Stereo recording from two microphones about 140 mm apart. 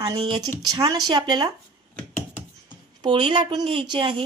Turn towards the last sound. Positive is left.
turn(degrees=-35)  # may be behind; listen again after turning